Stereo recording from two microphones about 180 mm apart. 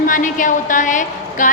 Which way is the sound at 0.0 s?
45° left (ahead or behind).